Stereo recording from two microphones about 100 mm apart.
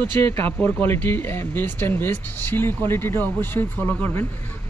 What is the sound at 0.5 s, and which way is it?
Speech, 15° left (ahead or behind).